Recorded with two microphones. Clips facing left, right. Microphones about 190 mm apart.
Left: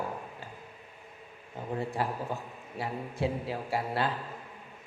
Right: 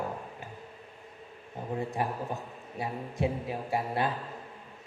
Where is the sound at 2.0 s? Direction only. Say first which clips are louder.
Even; 20° right (ahead or behind).